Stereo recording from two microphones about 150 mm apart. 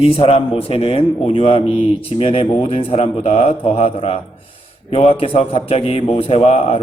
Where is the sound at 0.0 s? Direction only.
40° left (ahead or behind).